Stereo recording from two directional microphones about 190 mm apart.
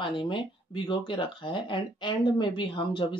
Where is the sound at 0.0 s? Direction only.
25° left (ahead or behind).